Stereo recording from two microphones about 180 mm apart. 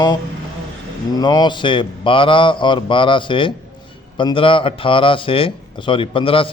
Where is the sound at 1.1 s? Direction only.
20° left (ahead or behind).